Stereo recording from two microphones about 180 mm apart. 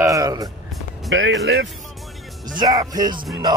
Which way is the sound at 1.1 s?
90° right.